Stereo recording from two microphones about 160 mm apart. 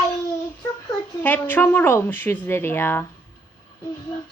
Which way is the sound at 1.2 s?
10° left (ahead or behind).